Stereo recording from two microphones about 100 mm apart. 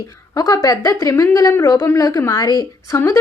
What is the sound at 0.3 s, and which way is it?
Speech, 35° left (ahead or behind).